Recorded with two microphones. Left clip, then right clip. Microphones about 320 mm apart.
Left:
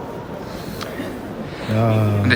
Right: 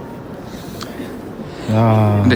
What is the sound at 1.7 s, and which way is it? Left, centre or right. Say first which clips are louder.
Speech: right 5 dB; right.